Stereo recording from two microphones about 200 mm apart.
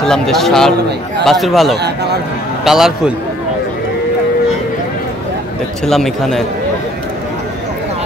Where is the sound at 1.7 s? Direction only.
55° right (ahead or behind).